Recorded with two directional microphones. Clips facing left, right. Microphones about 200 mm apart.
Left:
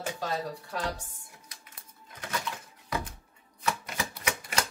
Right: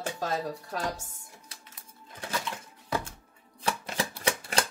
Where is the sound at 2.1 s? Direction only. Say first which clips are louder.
Right 2 dB; 30° right (ahead or behind).